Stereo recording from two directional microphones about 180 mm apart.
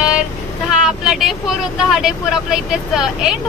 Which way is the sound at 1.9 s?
5° right (ahead or behind).